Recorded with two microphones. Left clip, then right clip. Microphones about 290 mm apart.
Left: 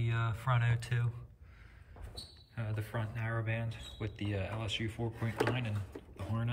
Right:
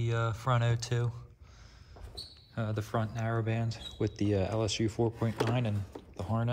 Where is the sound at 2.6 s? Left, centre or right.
Centre.